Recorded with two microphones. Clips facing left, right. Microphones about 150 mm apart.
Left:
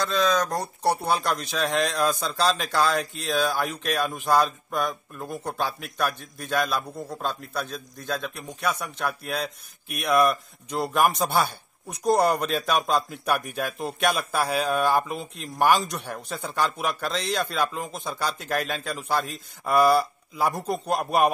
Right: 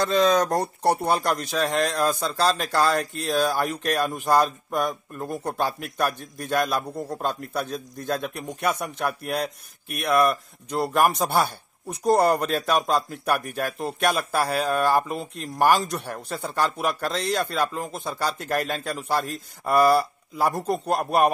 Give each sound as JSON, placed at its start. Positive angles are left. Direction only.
{"t": 1.2, "sound": "a man's voice", "side_deg": -10}